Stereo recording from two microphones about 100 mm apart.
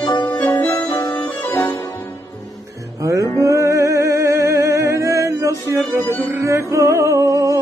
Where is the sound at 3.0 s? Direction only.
30° right (ahead or behind).